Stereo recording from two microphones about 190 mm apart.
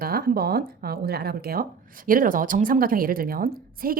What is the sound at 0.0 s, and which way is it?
Speech, 50° right (ahead or behind).